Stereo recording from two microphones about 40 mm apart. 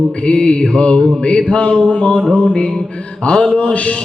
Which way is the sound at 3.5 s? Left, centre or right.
Left.